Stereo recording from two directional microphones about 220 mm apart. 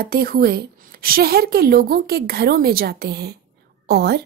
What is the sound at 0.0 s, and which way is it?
A woman's voice, 40° right (ahead or behind).